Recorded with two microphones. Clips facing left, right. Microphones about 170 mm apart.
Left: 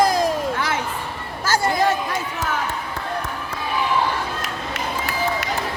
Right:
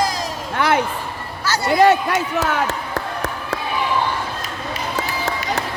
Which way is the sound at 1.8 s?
75° right (ahead or behind).